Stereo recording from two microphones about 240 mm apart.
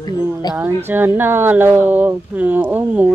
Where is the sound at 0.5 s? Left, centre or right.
Centre.